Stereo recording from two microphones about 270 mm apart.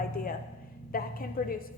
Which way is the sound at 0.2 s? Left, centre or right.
Left.